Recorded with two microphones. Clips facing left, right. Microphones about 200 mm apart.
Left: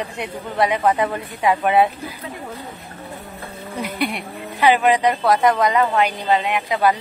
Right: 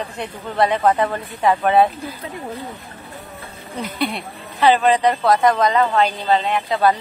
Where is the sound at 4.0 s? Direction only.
10° left (ahead or behind).